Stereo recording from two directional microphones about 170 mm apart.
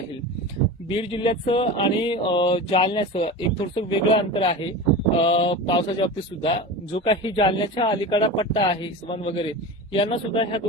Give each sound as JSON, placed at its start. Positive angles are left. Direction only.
{"t": 0.9, "sound": "speech", "side_deg": 30}